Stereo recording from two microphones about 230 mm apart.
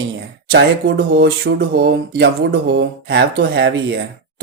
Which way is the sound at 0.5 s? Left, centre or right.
Right.